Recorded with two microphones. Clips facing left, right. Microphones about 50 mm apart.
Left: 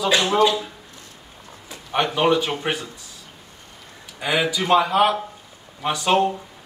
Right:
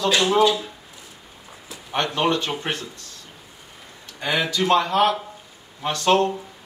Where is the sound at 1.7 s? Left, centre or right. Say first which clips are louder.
Left 2 dB; centre.